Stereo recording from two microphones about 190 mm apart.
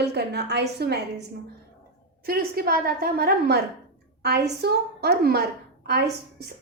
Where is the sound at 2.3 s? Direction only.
55° right (ahead or behind).